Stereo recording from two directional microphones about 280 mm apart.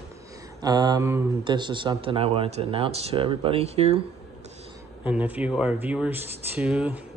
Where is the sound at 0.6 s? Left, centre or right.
Centre.